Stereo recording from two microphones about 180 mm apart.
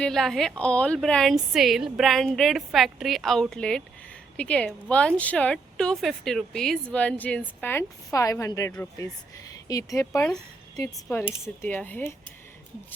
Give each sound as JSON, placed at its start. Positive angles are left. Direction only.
{"t": 0.0, "sound": "a woman's voice", "side_deg": 0}